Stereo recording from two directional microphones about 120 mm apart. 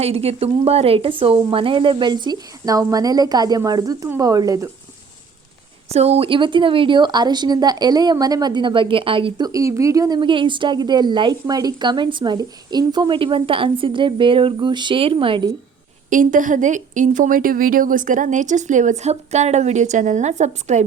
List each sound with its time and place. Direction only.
0.0 s speech: 60° right (ahead or behind); by 4.7 s 30° right (ahead or behind)
5.9 s speech: 60° right (ahead or behind)
9.5 s speech: 25° right (ahead or behind)
10.2 s a woman's voice: 45° right (ahead or behind)
16.0 s speech: 90° right